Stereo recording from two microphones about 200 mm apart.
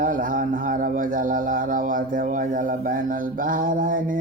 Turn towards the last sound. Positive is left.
turn(degrees=-45)  # may be behind; listen again after turning